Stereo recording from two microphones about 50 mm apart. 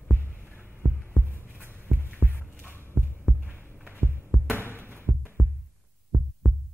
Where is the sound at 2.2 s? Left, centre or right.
Right.